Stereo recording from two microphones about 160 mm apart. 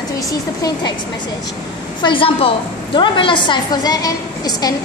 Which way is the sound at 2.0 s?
30° left (ahead or behind).